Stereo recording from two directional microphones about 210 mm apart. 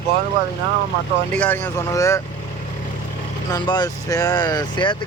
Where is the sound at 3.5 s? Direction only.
20° left (ahead or behind).